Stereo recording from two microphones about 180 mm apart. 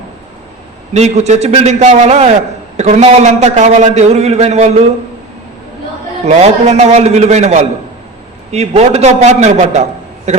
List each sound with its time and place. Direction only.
0.9 s a man's voice: 40° right (ahead or behind)
6.2 s a man's voice: 40° right (ahead or behind)